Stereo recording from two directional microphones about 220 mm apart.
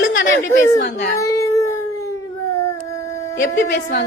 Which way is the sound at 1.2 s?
15° left (ahead or behind).